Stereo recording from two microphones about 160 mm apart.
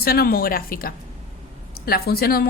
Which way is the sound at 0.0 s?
70° left (ahead or behind).